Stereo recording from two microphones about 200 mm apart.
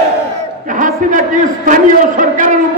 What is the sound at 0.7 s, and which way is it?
A man's voice, 40° right (ahead or behind).